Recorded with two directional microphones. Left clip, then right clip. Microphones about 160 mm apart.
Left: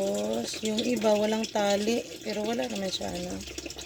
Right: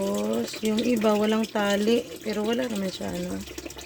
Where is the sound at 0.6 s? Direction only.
40° right (ahead or behind).